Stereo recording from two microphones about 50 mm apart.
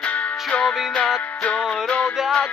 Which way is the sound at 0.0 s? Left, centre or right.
Left.